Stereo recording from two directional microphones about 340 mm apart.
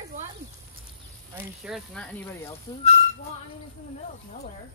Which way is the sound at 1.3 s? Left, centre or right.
Centre.